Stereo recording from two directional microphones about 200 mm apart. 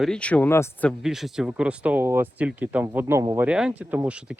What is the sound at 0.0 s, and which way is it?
Speech, 5° left (ahead or behind).